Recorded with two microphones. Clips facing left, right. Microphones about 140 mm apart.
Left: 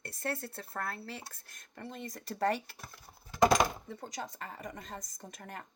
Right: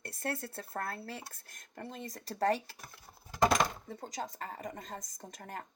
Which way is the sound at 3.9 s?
45° right (ahead or behind).